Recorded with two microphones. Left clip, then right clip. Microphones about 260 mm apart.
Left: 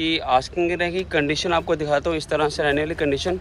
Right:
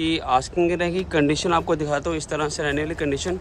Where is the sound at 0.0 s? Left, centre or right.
Centre.